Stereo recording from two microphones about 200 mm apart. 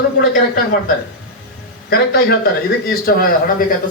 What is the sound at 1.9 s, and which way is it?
A man's voice, 50° left (ahead or behind).